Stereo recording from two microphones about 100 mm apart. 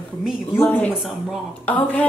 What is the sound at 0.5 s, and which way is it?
Speech, 20° left (ahead or behind).